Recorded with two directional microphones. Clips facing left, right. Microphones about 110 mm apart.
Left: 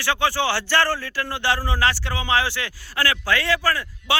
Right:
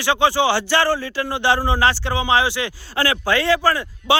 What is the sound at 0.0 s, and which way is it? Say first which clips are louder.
Speech: right 5 dB; 20° right (ahead or behind).